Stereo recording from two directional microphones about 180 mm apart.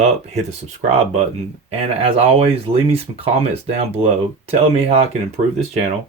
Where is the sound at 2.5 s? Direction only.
30° right (ahead or behind).